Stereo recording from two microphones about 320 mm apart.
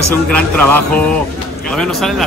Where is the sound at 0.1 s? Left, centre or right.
Centre.